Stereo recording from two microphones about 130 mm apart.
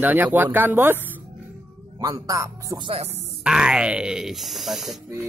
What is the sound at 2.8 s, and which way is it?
Speech, 50° right (ahead or behind).